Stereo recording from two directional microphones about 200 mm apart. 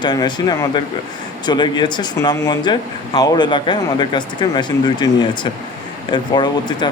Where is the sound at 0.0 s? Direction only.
20° left (ahead or behind).